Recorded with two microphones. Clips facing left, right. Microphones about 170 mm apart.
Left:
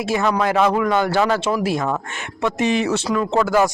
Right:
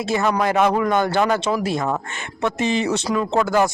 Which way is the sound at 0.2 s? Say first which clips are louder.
Even; 5° right (ahead or behind).